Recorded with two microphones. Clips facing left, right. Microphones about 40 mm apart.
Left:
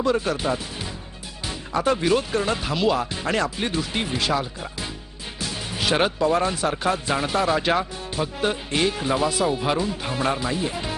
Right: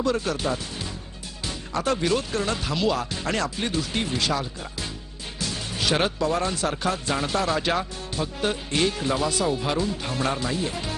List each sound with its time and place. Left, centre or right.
0.0 s speech: centre